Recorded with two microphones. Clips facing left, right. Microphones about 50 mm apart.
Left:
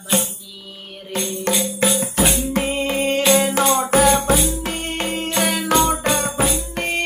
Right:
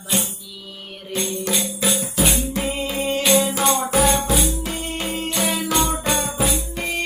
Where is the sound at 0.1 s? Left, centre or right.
Left.